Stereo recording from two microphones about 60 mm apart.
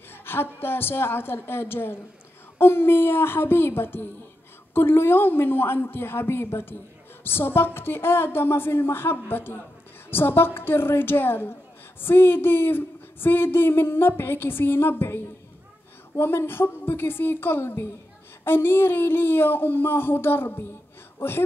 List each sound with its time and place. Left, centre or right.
0.1 s a woman's voice: left